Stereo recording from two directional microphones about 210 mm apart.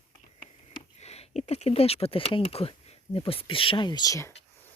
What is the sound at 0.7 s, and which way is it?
Speech, 30° left (ahead or behind).